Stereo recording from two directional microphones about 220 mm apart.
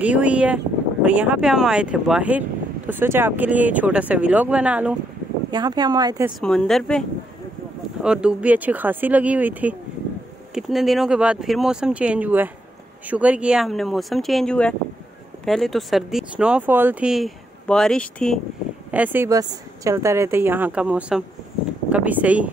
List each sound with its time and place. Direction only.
0.0 s speech: 5° right (ahead or behind)
5.5 s speech: 20° right (ahead or behind)
6.4 s speech: 5° left (ahead or behind)
18.9 s speech: 10° right (ahead or behind)